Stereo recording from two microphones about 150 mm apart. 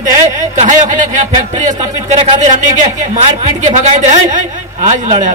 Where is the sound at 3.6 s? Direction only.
55° right (ahead or behind).